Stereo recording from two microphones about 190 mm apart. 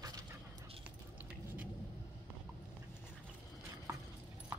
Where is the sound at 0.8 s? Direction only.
10° right (ahead or behind).